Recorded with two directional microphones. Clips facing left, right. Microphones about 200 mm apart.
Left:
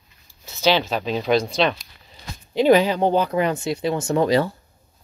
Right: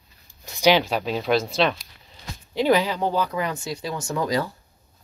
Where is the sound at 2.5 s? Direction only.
20° left (ahead or behind).